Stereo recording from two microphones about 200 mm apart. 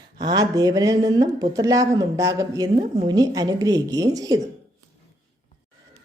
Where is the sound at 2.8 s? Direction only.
30° right (ahead or behind).